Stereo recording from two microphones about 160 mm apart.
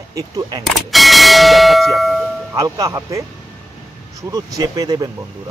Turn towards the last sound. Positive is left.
turn(degrees=-20)  # may be behind; listen again after turning